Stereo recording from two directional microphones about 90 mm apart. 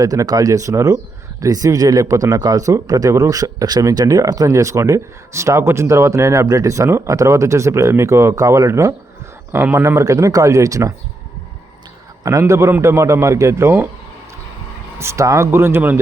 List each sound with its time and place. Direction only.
0.0 s speech: 40° right (ahead or behind)
12.2 s speech: 35° right (ahead or behind)
14.9 s speech: 35° right (ahead or behind)